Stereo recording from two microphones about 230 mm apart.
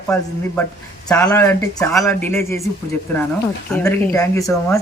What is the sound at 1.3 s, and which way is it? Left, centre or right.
Speech, centre.